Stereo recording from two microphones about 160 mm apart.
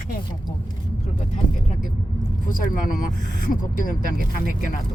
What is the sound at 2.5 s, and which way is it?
Speech, 60° left (ahead or behind).